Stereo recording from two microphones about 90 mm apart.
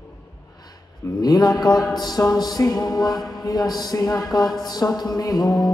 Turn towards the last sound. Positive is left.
turn(degrees=50)  # may be behind; listen again after turning